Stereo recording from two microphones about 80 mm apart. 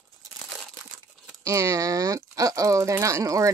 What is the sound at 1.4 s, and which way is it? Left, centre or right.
Speech, right.